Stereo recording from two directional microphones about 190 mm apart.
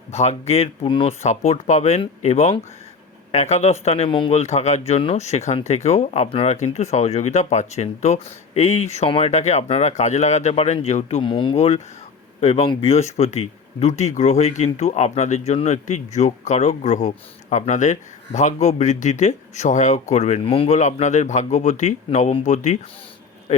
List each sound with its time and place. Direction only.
0.1 s speech: 35° left (ahead or behind)